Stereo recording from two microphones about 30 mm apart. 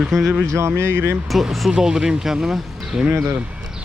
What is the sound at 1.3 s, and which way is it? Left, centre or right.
Speech, centre.